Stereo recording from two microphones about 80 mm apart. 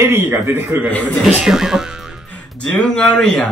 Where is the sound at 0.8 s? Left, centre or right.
Centre.